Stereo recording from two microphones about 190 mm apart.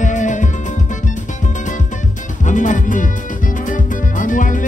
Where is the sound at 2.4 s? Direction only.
40° left (ahead or behind).